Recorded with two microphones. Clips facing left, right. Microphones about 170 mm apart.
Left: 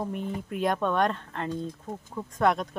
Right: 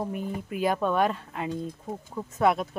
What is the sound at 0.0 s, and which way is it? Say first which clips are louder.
A woman's voice: even; 5° right (ahead or behind).